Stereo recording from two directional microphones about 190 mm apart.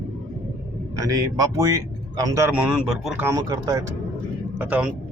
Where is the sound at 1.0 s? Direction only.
15° right (ahead or behind).